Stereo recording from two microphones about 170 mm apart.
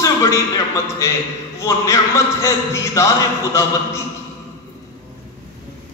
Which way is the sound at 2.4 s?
15° left (ahead or behind).